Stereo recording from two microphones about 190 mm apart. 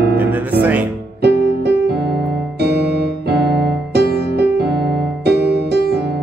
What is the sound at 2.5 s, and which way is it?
Electric piano, 60° right (ahead or behind).